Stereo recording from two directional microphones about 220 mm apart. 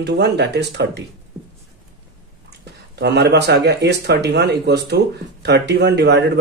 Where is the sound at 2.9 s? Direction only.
50° right (ahead or behind).